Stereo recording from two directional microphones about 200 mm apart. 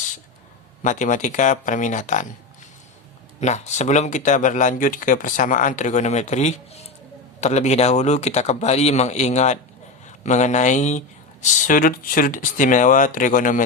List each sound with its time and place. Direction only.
0.8 s speech: 40° left (ahead or behind)
3.4 s speech: 35° left (ahead or behind)